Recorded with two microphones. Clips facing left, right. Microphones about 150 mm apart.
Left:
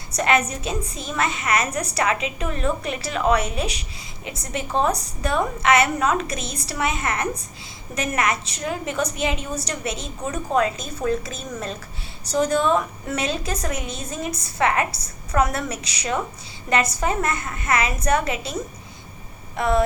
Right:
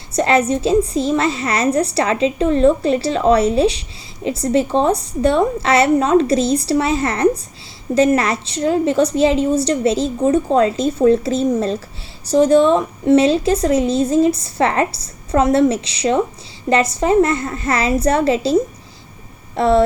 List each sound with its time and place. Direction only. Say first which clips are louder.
0.1 s a woman's voice: right 6 dB; 30° right (ahead or behind)